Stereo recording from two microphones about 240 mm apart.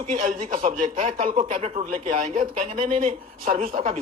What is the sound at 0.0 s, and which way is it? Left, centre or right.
Speech, right.